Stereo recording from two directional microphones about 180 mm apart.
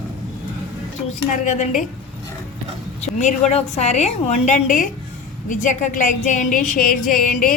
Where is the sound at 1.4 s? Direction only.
40° left (ahead or behind).